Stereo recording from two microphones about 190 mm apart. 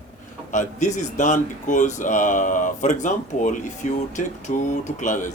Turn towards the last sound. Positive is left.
turn(degrees=40)  # may be behind; listen again after turning